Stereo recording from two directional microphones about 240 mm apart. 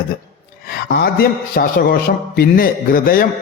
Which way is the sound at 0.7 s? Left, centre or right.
Left.